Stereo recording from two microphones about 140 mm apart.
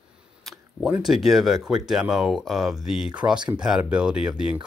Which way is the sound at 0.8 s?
5° right (ahead or behind).